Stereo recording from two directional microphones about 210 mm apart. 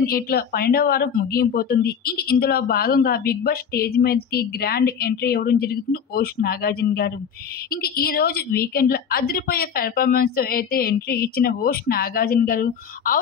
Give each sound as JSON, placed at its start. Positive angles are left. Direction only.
{"t": 0.0, "sound": "speech", "side_deg": 45}